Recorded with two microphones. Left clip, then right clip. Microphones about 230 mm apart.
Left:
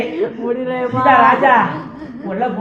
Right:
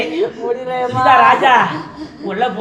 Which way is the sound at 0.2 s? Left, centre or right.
Right.